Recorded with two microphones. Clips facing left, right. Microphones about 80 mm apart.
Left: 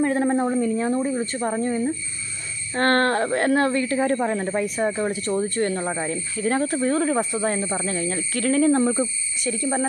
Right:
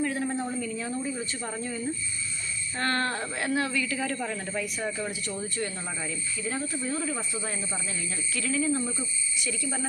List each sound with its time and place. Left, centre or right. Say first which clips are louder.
0.0 s a sound: left 9 dB; left
2.7 s speech: left 9 dB; left
9.5 s speech: left 10 dB; left